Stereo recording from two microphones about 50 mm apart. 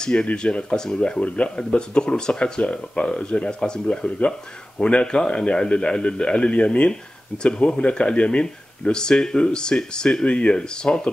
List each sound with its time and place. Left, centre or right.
0.0 s speech: centre